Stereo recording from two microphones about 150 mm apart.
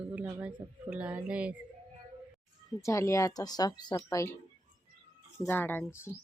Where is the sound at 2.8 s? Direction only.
20° left (ahead or behind).